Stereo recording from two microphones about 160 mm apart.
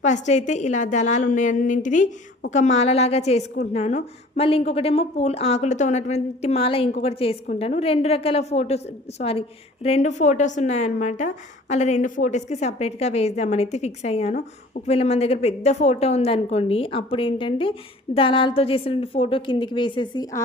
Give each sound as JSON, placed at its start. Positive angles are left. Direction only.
{"t": 0.0, "sound": "a woman's voice", "side_deg": 50}